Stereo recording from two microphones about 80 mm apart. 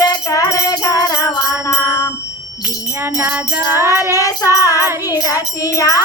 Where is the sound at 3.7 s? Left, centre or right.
Left.